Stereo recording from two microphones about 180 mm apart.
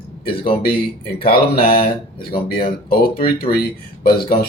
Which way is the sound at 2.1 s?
60° left (ahead or behind).